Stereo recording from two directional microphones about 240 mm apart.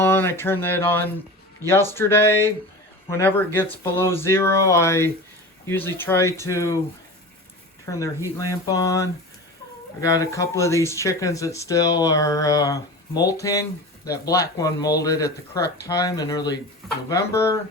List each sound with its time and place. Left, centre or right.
0.0 s speech: centre
7.9 s speech: centre